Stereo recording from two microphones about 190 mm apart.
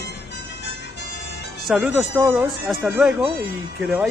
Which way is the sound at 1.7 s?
5° right (ahead or behind).